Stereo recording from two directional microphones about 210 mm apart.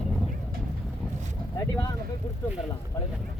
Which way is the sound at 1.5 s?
15° left (ahead or behind).